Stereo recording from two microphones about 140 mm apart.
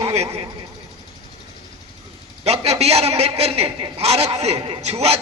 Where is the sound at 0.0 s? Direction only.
45° right (ahead or behind).